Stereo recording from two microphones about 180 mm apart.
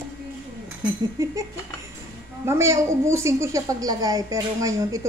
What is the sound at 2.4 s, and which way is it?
A woman's voice, 15° right (ahead or behind).